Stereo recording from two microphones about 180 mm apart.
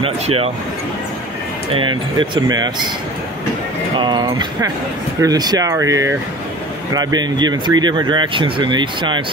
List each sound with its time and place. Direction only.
0.0 s speech: 35° right (ahead or behind)
1.7 s speech: 25° right (ahead or behind)
3.9 s speech: 25° right (ahead or behind)